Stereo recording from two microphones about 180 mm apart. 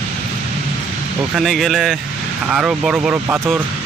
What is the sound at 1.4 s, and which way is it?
Speech, centre (ahead or behind).